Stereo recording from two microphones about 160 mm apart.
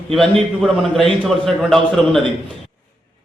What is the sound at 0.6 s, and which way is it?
A man's voice, centre (ahead or behind).